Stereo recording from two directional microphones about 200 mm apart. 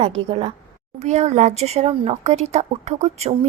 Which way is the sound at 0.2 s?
25° right (ahead or behind).